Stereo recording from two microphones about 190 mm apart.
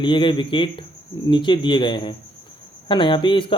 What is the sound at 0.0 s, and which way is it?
Speech, 25° left (ahead or behind).